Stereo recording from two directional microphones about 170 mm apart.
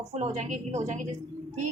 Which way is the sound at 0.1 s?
40° right (ahead or behind).